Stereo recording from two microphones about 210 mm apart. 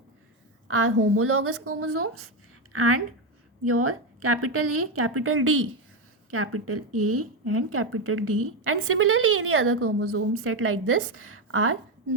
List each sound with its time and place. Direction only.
0.7 s speech: 80° right